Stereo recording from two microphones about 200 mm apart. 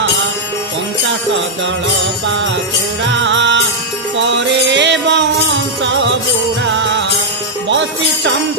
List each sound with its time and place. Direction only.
2.2 s music: 70° right (ahead or behind)
6.6 s music: 65° right (ahead or behind)